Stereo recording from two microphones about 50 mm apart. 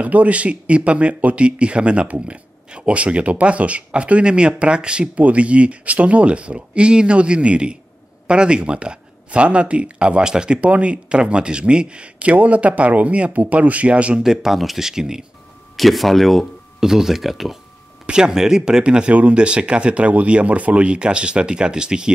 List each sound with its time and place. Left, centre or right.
0.0 s speech: right
10.6 s speech: right
14.2 s speech: centre
15.7 s speech: centre
18.0 s speech: centre